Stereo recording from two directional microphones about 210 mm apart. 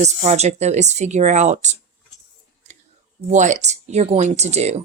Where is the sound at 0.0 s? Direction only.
35° right (ahead or behind).